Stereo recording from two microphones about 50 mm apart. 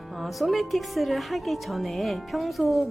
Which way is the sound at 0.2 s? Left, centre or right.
Centre.